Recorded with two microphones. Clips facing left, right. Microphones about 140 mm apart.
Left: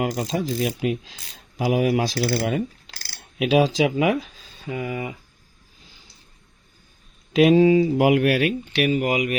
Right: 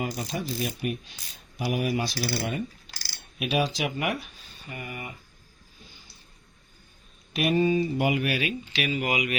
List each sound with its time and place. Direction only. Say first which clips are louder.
0.0 s speech: left 7 dB; 90° left
1.5 s coin: left 7 dB; 90° left
4.6 s speech: left 10 dB; 90° left
7.3 s speech: left 9 dB; 90° left; by 9.0 s 60° left (ahead or behind)
9.0 s speech: left 5 dB; 45° left (ahead or behind)